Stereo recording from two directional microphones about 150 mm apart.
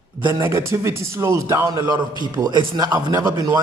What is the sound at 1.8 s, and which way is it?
Speech, 30° right (ahead or behind).